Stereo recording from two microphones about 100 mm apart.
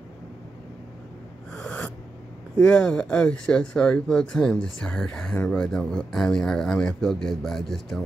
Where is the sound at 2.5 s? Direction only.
10° left (ahead or behind).